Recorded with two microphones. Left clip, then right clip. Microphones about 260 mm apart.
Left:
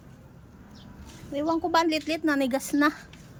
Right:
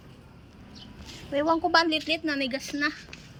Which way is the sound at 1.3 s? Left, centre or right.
Centre.